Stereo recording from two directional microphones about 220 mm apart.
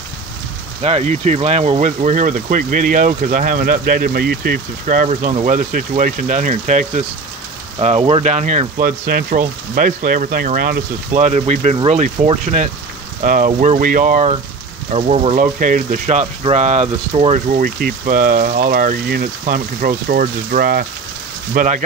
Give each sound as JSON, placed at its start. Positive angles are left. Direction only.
{"t": 0.8, "sound": "speech", "side_deg": -30}
{"t": 15.3, "sound": "speech", "side_deg": -40}
{"t": 17.5, "sound": "speech", "side_deg": -40}